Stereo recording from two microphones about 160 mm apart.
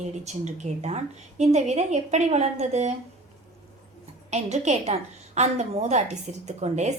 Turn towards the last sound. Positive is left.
turn(degrees=-45)  # may be behind; listen again after turning